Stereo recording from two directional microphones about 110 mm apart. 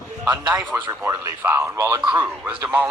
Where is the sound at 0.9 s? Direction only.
25° right (ahead or behind).